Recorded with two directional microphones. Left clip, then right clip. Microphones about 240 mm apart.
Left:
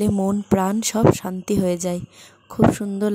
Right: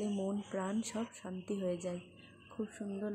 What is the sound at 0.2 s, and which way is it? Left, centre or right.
Speech, left.